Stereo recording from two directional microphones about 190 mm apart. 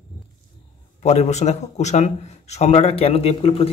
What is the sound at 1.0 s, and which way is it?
A man's voice, 35° left (ahead or behind).